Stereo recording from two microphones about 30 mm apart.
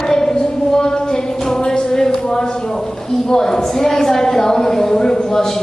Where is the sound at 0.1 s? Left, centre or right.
Centre.